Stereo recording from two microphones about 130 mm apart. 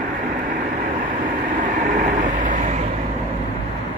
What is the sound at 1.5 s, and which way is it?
Vehicle, 80° right.